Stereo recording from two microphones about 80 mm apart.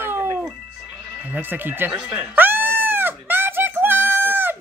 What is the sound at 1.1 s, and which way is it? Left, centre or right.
Speech, centre.